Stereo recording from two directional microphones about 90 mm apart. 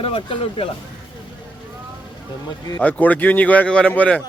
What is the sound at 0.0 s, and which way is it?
Speech, 80° left.